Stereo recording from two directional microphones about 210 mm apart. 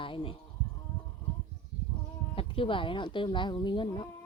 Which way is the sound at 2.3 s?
25° left (ahead or behind).